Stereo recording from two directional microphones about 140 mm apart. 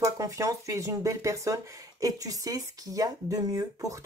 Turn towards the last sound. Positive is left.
turn(degrees=-25)  # may be behind; listen again after turning